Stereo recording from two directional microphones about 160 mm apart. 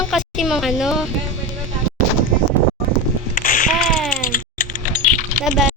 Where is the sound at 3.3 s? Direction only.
60° left (ahead or behind).